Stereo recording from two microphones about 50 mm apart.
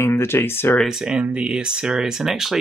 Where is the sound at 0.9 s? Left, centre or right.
Centre.